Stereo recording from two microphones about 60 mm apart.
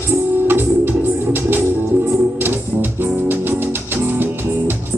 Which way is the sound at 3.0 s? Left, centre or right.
Right.